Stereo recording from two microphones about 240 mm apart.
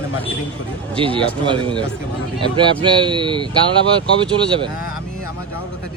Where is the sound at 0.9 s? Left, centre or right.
Right.